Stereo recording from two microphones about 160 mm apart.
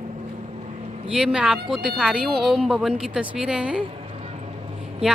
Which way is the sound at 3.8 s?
35° right (ahead or behind).